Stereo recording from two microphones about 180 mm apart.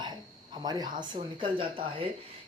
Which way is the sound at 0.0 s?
25° right (ahead or behind).